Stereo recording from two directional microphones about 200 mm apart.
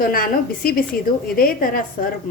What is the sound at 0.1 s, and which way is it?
A woman's voice, 45° left (ahead or behind).